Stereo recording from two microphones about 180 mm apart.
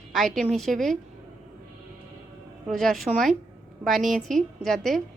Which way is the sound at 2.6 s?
Centre (ahead or behind).